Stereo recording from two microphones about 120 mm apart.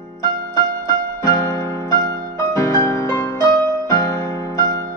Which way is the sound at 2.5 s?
30° left (ahead or behind).